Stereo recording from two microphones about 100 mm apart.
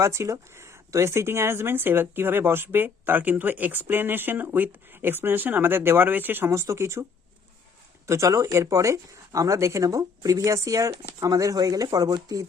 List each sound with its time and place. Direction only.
0.0 s speech: 30° right (ahead or behind)
8.0 s speech: 30° right (ahead or behind)